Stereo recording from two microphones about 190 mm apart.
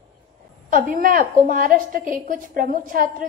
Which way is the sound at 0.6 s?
45° right (ahead or behind).